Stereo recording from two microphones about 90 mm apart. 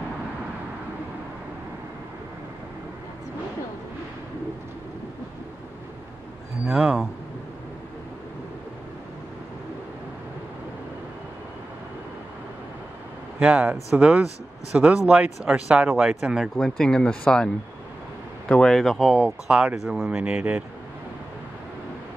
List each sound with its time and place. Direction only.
6.6 s a sound: 10° right (ahead or behind)
13.4 s speech: 10° right (ahead or behind)
16.5 s speech: 5° left (ahead or behind)
18.5 s speech: 5° left (ahead or behind); by 20.6 s 15° right (ahead or behind)